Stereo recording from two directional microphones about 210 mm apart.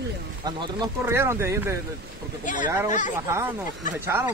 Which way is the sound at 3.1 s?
10° right (ahead or behind).